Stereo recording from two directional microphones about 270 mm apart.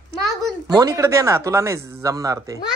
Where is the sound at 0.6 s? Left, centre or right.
Centre.